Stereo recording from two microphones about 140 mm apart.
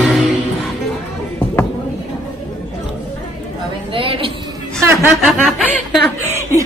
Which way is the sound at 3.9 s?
40° right (ahead or behind).